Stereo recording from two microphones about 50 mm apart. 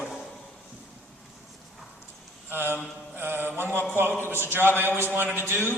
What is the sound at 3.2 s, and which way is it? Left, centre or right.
Mantra, right.